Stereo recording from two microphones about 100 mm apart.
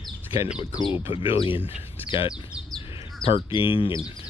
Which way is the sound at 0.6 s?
50° left (ahead or behind).